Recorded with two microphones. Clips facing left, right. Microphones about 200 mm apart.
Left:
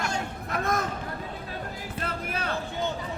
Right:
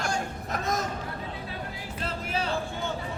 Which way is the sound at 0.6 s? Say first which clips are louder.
Left 2 dB; 55° left (ahead or behind).